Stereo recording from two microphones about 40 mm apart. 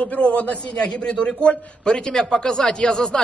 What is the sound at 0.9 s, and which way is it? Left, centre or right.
Speech, left.